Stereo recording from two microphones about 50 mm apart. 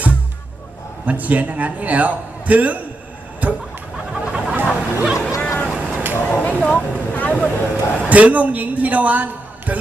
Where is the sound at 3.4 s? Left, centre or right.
Right.